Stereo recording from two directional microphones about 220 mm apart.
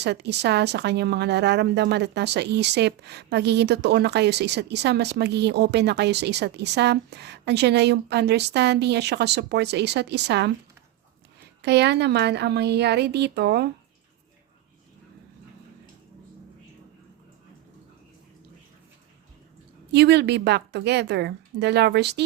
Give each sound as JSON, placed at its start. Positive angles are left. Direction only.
{"t": 0.0, "sound": "speech", "side_deg": -50}
{"t": 11.6, "sound": "speech", "side_deg": -50}
{"t": 19.9, "sound": "speech", "side_deg": -50}